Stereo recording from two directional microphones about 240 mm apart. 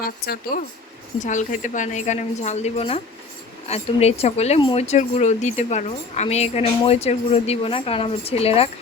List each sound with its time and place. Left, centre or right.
0.0 s a woman's voice: left